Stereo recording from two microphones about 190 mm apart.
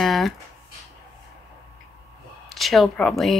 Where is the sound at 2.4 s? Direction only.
Centre (ahead or behind).